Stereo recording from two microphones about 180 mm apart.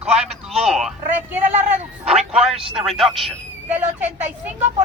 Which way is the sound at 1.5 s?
40° right (ahead or behind).